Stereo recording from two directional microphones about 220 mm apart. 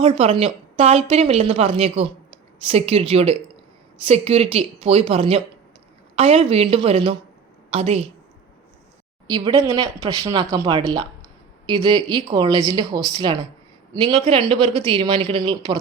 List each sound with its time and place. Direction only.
0.0 s speech: 25° right (ahead or behind)
9.2 s speech: 20° right (ahead or behind)